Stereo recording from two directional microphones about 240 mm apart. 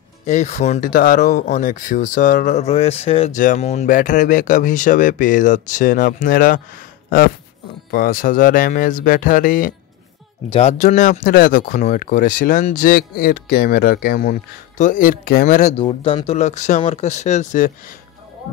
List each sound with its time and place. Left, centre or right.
0.3 s speech: left